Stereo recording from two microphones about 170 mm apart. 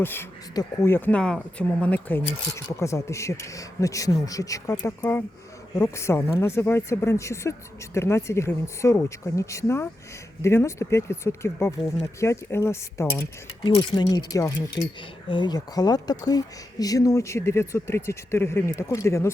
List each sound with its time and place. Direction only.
0.0 s speech: 15° left (ahead or behind)
13.7 s speech: 25° left (ahead or behind)
15.3 s speech: 25° left (ahead or behind)